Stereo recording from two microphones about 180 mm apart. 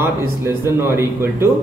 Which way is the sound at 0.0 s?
15° right (ahead or behind).